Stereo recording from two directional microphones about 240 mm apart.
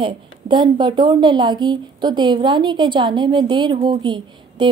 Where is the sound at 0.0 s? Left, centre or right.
Centre.